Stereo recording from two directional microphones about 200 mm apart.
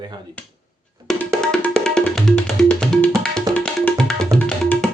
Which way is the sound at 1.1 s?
Centre (ahead or behind).